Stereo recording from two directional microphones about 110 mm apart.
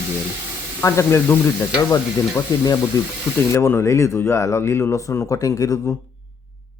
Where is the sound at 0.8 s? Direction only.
20° left (ahead or behind).